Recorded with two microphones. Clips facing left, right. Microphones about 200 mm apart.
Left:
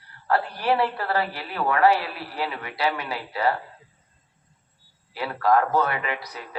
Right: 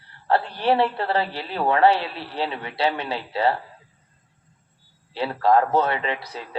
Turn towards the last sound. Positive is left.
turn(degrees=-30)  # may be behind; listen again after turning